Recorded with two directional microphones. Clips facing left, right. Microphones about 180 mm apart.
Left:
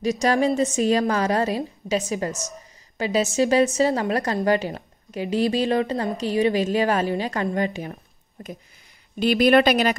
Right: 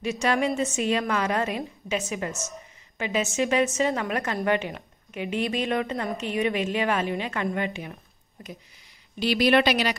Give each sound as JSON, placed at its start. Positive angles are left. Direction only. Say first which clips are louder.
{"t": 0.0, "sound": "a woman's voice", "louder": "left 4 dB", "side_deg": 40}
{"t": 8.4, "sound": "a sound", "louder": "left 5 dB", "side_deg": 45}
{"t": 9.2, "sound": "speech", "louder": "left 4 dB", "side_deg": 50}